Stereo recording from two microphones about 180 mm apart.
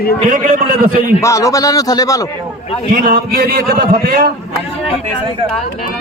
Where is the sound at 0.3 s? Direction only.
45° right (ahead or behind).